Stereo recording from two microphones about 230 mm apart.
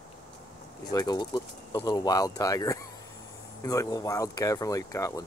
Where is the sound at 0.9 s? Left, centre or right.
Centre.